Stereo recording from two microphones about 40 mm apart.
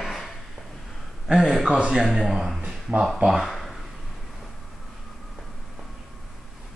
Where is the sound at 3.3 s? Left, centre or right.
Centre.